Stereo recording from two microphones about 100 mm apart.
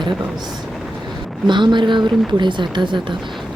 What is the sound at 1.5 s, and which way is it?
Speech, 50° right (ahead or behind).